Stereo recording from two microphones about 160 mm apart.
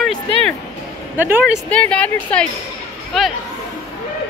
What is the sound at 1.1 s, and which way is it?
Speech, 10° right (ahead or behind).